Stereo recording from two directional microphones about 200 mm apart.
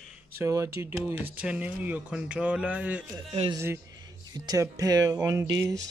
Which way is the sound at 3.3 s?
30° right (ahead or behind).